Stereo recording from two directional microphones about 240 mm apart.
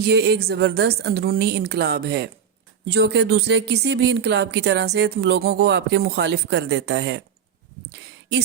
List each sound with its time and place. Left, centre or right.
0.0 s speech: right